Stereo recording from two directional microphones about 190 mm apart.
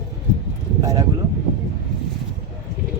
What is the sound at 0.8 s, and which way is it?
Speech, 20° right (ahead or behind).